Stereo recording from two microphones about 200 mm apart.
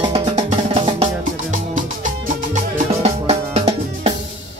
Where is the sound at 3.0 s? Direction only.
30° right (ahead or behind).